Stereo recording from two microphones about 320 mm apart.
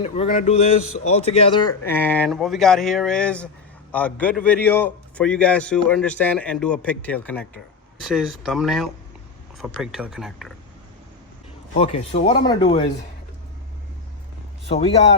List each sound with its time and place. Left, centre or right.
0.0 s a man's voice: left; by 10.5 s centre
11.8 s speech: left
14.7 s speech: centre